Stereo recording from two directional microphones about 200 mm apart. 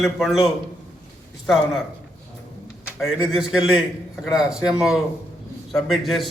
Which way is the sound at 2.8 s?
5° right (ahead or behind).